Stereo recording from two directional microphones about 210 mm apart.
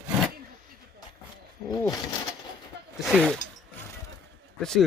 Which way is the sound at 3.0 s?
Centre (ahead or behind).